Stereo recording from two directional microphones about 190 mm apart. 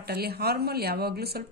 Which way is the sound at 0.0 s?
55° right (ahead or behind).